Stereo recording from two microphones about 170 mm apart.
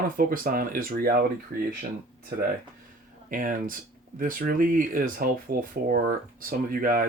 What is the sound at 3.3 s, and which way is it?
Speech, 55° right (ahead or behind).